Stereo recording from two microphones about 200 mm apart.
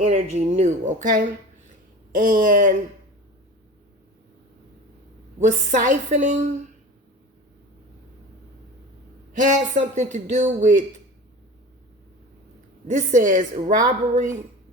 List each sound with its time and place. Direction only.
0.0 s a woman's voice: 35° right (ahead or behind)
5.4 s a woman's voice: 40° right (ahead or behind)
9.4 s a woman's voice: 40° right (ahead or behind)
12.9 s a woman's voice: 40° right (ahead or behind)